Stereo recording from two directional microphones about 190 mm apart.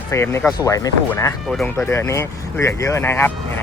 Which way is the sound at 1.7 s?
15° left (ahead or behind).